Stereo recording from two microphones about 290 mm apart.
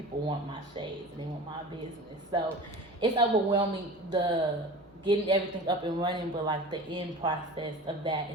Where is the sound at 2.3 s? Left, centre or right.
Centre.